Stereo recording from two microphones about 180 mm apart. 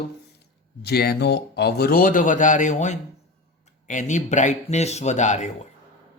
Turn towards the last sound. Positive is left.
turn(degrees=40)  # may be behind; listen again after turning